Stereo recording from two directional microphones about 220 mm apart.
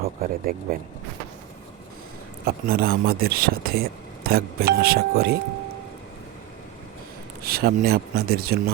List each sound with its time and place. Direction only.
0.0 s speech: 40° right (ahead or behind)
2.4 s speech: 40° right (ahead or behind)
7.4 s speech: 45° right (ahead or behind)